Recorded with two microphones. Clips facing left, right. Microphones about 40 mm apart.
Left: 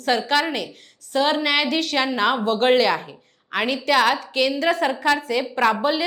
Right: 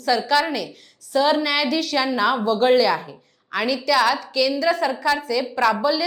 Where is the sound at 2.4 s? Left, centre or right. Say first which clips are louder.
Right 1 dB; left.